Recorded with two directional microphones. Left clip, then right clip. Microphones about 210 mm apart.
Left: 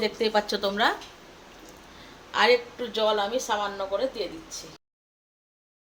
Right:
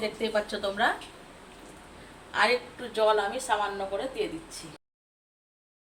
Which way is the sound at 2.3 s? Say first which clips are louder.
Left 2 dB; 35° left (ahead or behind).